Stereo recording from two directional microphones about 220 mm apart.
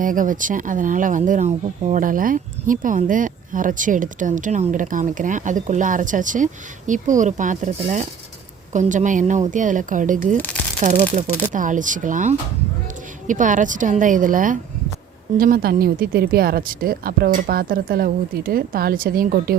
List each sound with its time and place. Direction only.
0.0 s speech: 40° right (ahead or behind)
10.3 s speech: 10° left (ahead or behind)
10.8 s speech: 35° right (ahead or behind)